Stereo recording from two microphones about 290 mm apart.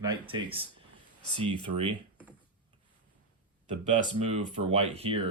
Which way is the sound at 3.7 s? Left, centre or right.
Right.